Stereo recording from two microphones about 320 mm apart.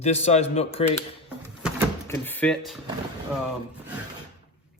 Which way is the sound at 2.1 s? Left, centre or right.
Centre.